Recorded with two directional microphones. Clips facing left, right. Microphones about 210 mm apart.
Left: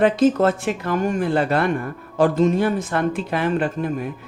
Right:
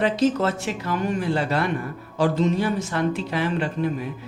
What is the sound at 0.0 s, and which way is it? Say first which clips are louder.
Speech: left 5 dB; 50° left (ahead or behind).